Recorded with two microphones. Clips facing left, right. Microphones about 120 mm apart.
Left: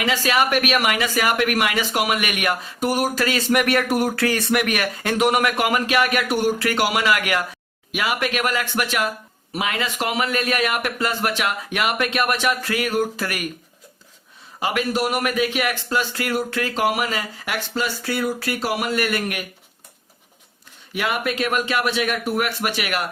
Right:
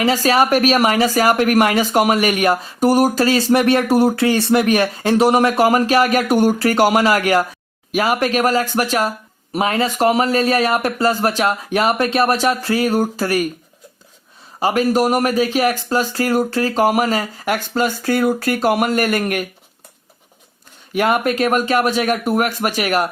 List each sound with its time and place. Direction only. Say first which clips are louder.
0.0 s a woman's voice: right 5 dB; 35° right (ahead or behind)
14.6 s a woman's voice: right 6 dB; 35° right (ahead or behind)
20.9 s a woman's voice: right 7 dB; 45° right (ahead or behind)